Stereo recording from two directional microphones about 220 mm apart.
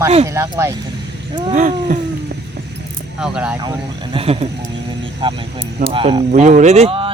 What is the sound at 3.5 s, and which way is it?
A man's voice, 15° right (ahead or behind).